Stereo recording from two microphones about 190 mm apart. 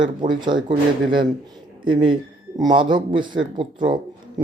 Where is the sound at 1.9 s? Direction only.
25° right (ahead or behind).